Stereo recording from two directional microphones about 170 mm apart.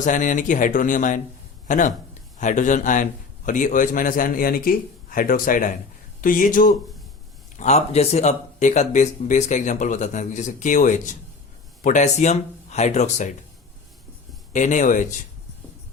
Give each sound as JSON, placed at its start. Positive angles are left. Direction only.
{"t": 0.0, "sound": "a man's voice", "side_deg": 50}
{"t": 7.5, "sound": "speech", "side_deg": 40}
{"t": 14.5, "sound": "speech", "side_deg": 45}